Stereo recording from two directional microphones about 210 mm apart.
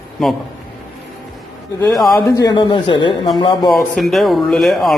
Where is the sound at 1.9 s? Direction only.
Centre (ahead or behind).